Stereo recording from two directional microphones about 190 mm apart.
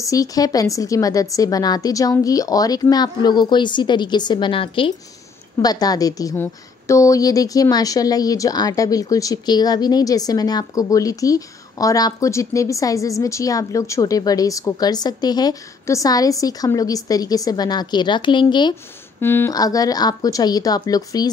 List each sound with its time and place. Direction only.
0.0 s a woman's voice: 20° left (ahead or behind)
19.1 s a woman's voice: 10° left (ahead or behind)